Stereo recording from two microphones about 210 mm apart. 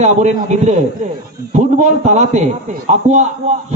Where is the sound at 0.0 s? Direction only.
35° right (ahead or behind).